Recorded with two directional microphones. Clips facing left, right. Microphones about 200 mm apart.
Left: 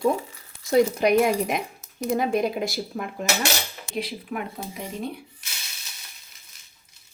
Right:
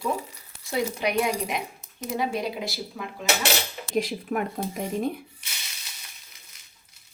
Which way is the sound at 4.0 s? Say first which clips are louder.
Right 4 dB; 45° right (ahead or behind).